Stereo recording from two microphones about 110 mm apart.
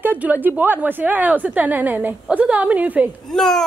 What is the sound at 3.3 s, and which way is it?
Speech, 5° left (ahead or behind).